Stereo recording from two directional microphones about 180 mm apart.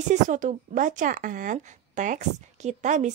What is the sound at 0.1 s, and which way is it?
A woman's voice, 45° right (ahead or behind).